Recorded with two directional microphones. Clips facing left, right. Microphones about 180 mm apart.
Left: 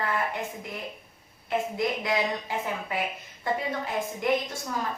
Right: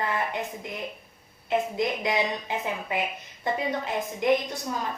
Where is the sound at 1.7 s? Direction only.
20° right (ahead or behind).